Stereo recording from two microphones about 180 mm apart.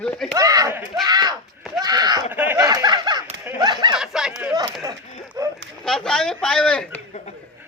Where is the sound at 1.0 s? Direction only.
20° right (ahead or behind).